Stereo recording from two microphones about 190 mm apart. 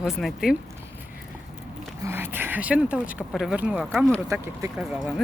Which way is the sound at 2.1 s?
10° right (ahead or behind).